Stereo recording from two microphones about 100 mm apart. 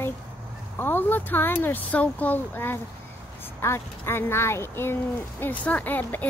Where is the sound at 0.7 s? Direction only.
20° left (ahead or behind).